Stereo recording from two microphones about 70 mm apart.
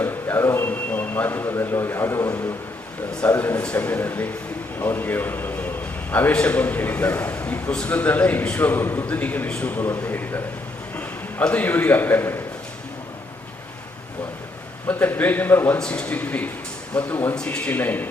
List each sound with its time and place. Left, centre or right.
0.0 s a man's voice: left
3.2 s a man's voice: left
14.8 s a man's voice: left
15.8 s a man's voice: centre
17.3 s a man's voice: centre
17.7 s a man's voice: left